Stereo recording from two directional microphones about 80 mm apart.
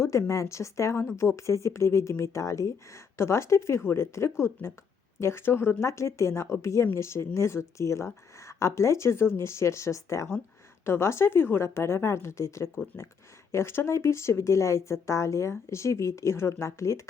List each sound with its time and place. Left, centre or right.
0.0 s a woman's voice: left